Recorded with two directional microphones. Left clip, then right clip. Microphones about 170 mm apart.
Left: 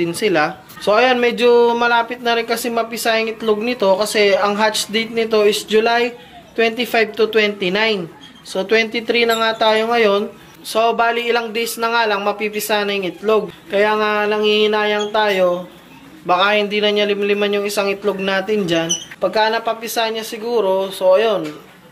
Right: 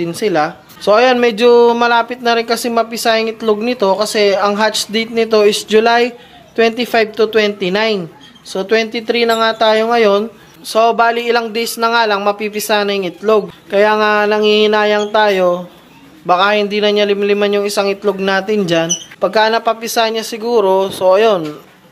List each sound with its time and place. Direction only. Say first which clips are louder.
0.0 s speech: right 2 dB; 25° right (ahead or behind); by 21.4 s 50° right (ahead or behind)